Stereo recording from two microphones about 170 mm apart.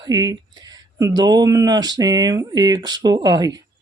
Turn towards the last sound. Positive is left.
turn(degrees=-20)  # may be behind; listen again after turning